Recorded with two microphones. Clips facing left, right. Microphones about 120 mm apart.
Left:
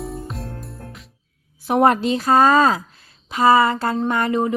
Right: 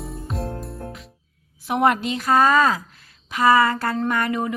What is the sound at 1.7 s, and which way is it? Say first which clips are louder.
A woman's voice: left 4 dB; 35° left (ahead or behind).